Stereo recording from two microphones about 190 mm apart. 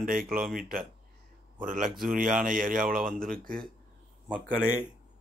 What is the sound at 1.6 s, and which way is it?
Speech, 45° right (ahead or behind).